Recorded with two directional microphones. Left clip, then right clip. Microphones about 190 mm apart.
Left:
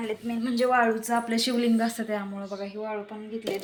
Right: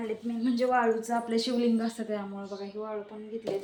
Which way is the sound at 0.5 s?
15° left (ahead or behind).